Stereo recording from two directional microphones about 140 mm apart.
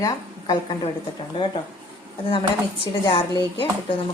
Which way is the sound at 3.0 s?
35° left (ahead or behind).